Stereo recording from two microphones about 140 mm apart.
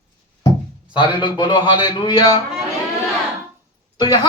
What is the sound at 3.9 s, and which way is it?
Speech, 30° left (ahead or behind).